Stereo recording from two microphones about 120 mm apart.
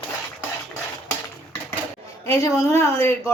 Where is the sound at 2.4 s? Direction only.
30° left (ahead or behind).